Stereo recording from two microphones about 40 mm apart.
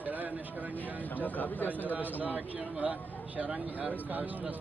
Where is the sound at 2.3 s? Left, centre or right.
Right.